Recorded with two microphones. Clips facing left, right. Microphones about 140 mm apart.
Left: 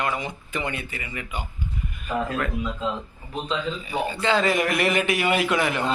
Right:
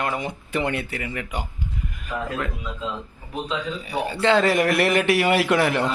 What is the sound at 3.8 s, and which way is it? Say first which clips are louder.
A man's voice: right 4 dB; 65° right (ahead or behind).